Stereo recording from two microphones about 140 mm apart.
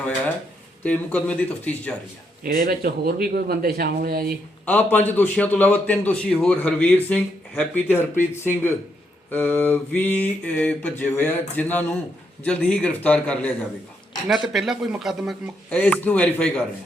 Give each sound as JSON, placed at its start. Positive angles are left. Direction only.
{"t": 0.9, "sound": "a man's voice", "side_deg": 10}
{"t": 2.4, "sound": "speech", "side_deg": -90}
{"t": 4.6, "sound": "a man's voice", "side_deg": 10}
{"t": 14.3, "sound": "speech", "side_deg": -5}
{"t": 15.7, "sound": "a man's voice", "side_deg": 10}